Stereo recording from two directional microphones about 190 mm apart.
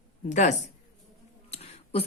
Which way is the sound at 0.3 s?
40° left (ahead or behind).